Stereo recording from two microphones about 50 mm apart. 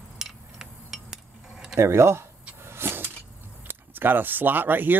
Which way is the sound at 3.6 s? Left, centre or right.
Right.